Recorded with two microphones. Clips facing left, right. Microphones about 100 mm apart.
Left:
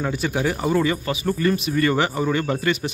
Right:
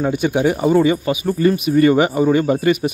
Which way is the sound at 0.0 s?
20° right (ahead or behind).